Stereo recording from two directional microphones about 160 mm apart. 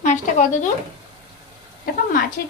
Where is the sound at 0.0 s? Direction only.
50° left (ahead or behind).